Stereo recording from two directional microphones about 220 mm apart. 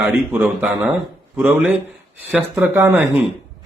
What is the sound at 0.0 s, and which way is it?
Speech, 5° right (ahead or behind).